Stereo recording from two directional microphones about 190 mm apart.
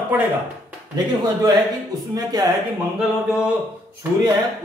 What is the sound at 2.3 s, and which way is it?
Speech, 20° right (ahead or behind).